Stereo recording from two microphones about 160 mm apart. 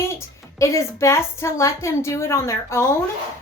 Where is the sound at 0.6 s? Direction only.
20° left (ahead or behind).